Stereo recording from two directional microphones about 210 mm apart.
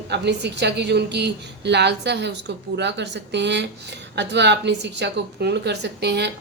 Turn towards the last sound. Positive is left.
turn(degrees=-55)  # may be behind; listen again after turning